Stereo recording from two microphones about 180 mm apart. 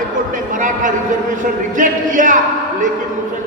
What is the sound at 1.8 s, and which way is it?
Speech, 45° right (ahead or behind).